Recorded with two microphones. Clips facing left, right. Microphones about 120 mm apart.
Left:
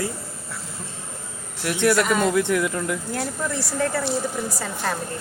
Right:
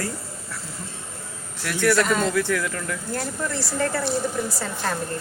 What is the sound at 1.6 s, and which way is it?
A man's voice, 20° left (ahead or behind).